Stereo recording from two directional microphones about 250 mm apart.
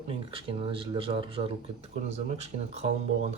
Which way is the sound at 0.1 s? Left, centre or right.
Right.